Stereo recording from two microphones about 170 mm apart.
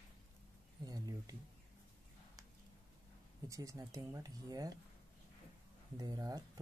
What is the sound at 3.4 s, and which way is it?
Speech, 20° right (ahead or behind).